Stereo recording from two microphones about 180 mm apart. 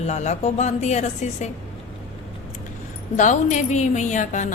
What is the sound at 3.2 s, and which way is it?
A woman's voice, 40° left (ahead or behind).